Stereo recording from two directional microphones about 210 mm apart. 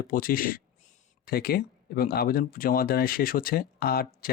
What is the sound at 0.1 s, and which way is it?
Speech, 40° left (ahead or behind).